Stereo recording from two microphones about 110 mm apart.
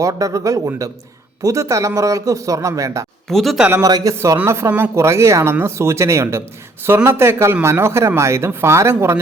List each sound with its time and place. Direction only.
0.0 s a man's voice: 30° right (ahead or behind)
3.2 s speech: centre (ahead or behind)
3.7 s a man's voice: 30° right (ahead or behind)